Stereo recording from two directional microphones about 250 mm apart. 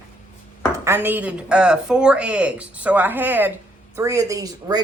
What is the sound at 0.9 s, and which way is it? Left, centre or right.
Speech, centre.